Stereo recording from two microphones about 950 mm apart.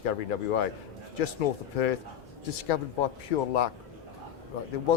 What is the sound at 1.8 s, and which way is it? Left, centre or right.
Speech, left.